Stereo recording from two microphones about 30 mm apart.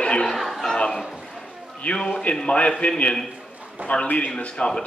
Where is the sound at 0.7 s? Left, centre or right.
Left.